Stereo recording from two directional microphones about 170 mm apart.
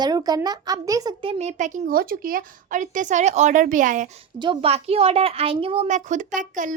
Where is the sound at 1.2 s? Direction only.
35° right (ahead or behind).